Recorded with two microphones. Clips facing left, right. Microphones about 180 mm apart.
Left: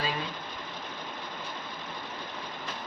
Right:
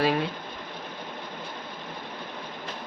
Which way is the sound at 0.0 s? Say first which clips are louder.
Right 9 dB; 65° right (ahead or behind).